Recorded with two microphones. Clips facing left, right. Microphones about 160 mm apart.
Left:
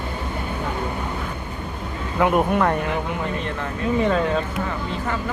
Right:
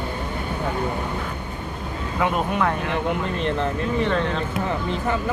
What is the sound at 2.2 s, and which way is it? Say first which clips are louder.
Speech: left 4 dB; 15° left (ahead or behind).